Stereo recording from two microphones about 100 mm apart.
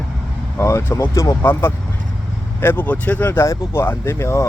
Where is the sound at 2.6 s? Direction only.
20° left (ahead or behind).